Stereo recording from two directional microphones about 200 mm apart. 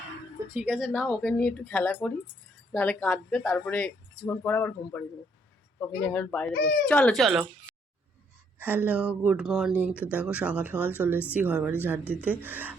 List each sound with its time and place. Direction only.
0.5 s speech: 5° right (ahead or behind)
1.0 s speech: 5° left (ahead or behind)
6.5 s speech: 60° left (ahead or behind)
6.8 s speech: 5° left (ahead or behind)
8.5 s speech: 10° right (ahead or behind)